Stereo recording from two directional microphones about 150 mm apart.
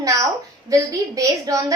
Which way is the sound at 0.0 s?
20° right (ahead or behind).